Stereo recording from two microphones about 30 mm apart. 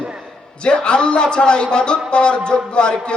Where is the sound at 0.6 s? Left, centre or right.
Left.